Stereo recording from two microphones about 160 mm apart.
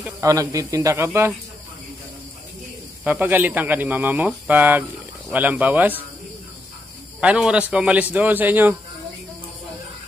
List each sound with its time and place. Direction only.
0.2 s a man's voice: 20° right (ahead or behind)
3.0 s speech: 10° right (ahead or behind)
7.2 s speech: 5° right (ahead or behind)